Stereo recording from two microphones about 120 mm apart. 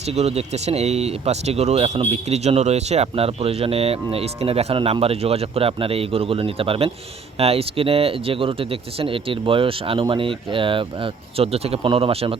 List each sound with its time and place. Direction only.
0.0 s speech: 60° right (ahead or behind)